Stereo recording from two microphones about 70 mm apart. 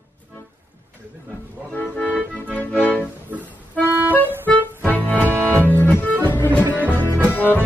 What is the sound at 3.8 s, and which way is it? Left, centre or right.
Accordion, right.